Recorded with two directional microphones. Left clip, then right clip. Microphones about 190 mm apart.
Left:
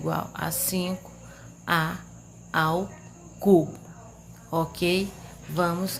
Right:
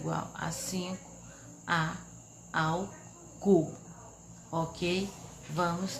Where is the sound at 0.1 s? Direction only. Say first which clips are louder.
Left 6 dB; 40° left (ahead or behind).